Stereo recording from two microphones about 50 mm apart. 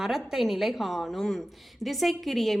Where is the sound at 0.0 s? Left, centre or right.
Centre.